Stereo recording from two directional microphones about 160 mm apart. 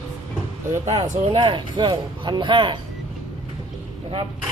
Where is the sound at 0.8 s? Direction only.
40° right (ahead or behind).